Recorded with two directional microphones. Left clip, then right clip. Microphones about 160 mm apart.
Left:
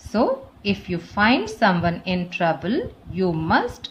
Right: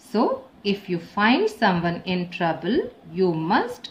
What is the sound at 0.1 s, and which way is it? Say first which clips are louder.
A woman's voice: left 2 dB; 40° left (ahead or behind).